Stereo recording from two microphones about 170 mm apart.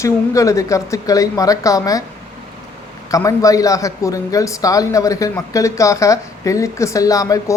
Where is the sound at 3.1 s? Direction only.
20° left (ahead or behind).